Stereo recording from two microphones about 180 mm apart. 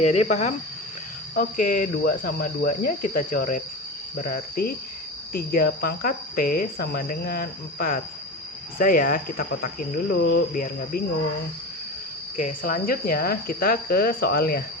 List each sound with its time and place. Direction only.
0.0 s speech: 35° left (ahead or behind); by 11.0 s 55° left (ahead or behind)
12.4 s speech: 50° left (ahead or behind)